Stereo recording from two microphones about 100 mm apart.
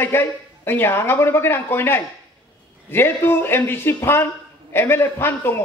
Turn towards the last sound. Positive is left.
turn(degrees=25)  # may be behind; listen again after turning